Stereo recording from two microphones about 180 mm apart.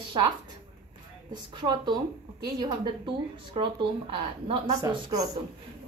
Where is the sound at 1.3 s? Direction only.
25° right (ahead or behind).